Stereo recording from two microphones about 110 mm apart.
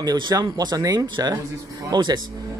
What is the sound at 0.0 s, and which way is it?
A man's voice, 35° right (ahead or behind).